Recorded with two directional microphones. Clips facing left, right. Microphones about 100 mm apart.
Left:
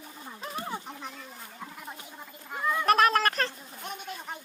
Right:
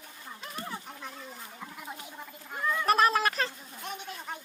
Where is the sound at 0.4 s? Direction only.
20° left (ahead or behind).